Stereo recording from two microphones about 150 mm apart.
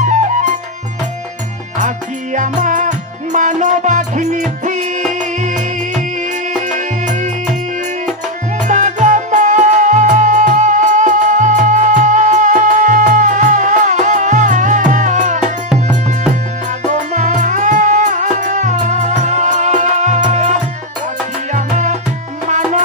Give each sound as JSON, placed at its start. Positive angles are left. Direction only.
{"t": 0.0, "sound": "music", "side_deg": -55}
{"t": 2.3, "sound": "music", "side_deg": -55}
{"t": 5.4, "sound": "music", "side_deg": -50}
{"t": 8.6, "sound": "music", "side_deg": -55}
{"t": 16.9, "sound": "music", "side_deg": -55}
{"t": 21.5, "sound": "music", "side_deg": -55}